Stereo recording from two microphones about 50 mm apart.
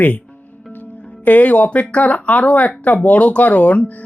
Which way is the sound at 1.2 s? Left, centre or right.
Left.